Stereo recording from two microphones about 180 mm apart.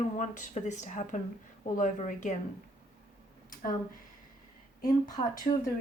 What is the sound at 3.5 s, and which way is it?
Speech, 50° left (ahead or behind).